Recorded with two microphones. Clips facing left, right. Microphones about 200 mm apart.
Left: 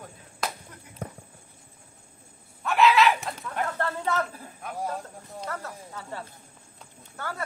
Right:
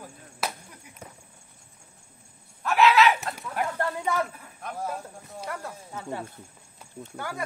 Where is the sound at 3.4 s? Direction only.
10° right (ahead or behind).